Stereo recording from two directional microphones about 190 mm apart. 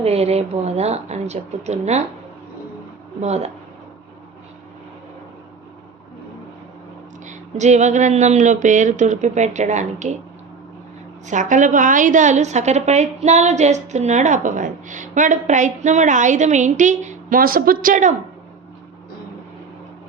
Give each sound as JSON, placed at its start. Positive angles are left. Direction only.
{"t": 0.0, "sound": "a woman's voice", "side_deg": -35}
{"t": 3.2, "sound": "a woman's voice", "side_deg": -35}
{"t": 7.3, "sound": "a woman's voice", "side_deg": -40}
{"t": 11.3, "sound": "a woman's voice", "side_deg": -40}